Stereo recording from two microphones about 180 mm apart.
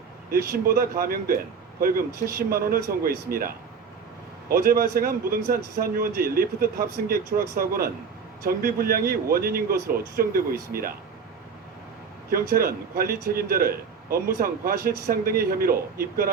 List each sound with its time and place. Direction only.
0.3 s speech: 55° right (ahead or behind)
12.3 s speech: 55° right (ahead or behind)